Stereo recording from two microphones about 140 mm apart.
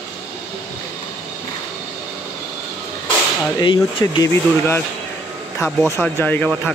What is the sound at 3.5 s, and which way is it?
Speech, 35° left (ahead or behind).